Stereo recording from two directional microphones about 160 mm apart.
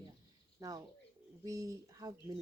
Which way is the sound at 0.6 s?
20° right (ahead or behind).